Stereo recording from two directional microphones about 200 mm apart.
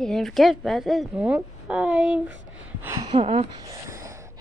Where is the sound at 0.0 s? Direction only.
Centre (ahead or behind); by 3.1 s 15° right (ahead or behind).